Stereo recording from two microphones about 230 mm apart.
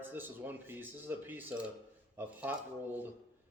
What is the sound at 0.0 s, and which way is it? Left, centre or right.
Speech, centre.